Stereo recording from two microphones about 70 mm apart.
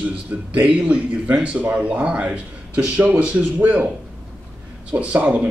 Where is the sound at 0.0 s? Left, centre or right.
Centre.